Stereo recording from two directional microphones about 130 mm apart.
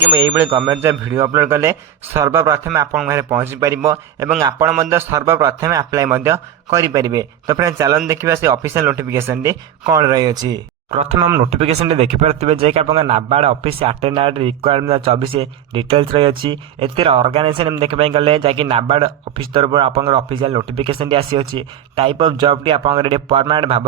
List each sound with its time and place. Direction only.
0.1 s a man's voice: 20° right (ahead or behind)
11.5 s speech: 50° right (ahead or behind)